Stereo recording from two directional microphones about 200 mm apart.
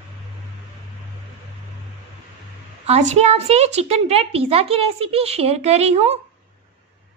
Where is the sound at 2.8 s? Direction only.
35° right (ahead or behind).